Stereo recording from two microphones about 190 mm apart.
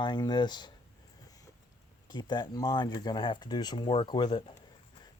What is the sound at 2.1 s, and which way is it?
Speech, 25° left (ahead or behind).